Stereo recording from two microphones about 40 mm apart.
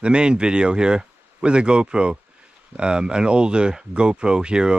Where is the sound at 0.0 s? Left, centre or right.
Right.